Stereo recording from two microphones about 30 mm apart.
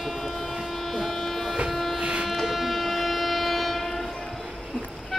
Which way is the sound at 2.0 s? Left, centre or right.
Right.